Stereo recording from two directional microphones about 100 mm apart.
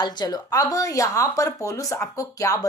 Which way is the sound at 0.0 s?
45° left (ahead or behind).